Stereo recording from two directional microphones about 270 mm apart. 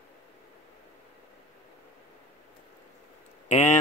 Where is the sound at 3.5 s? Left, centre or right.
Left.